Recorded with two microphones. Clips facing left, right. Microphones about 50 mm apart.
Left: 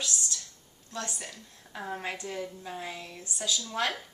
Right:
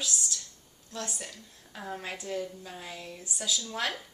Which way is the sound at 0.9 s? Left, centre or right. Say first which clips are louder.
Left 1 dB; centre.